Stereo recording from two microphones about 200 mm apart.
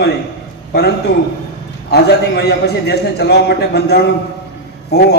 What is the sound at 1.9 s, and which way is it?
A man's voice, 55° left (ahead or behind).